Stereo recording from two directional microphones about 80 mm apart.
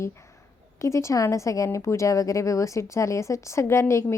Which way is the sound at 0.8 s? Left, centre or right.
Left.